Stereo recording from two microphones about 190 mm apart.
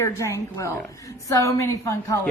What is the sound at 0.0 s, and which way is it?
A woman's voice, 15° left (ahead or behind).